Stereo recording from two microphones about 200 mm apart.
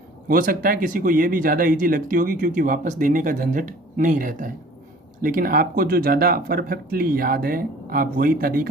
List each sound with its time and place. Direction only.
0.3 s speech: 45° right (ahead or behind)